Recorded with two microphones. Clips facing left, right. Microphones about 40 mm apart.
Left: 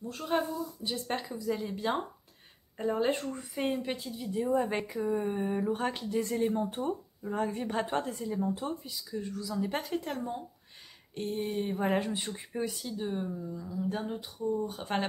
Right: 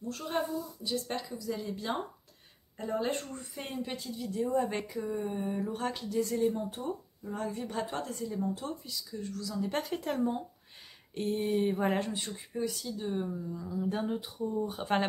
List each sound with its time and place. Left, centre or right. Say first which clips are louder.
0.1 s speech: left 3 dB; centre
0.8 s speech: left 1 dB; left
6.5 s speech: left 4 dB; left
8.1 s speech: left 2 dB; centre
12.1 s speech: left 2 dB; centre
12.4 s speech: even; left; by 15.0 s centre